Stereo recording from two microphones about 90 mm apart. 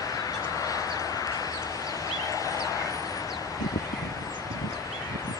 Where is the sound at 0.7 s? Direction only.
40° left (ahead or behind).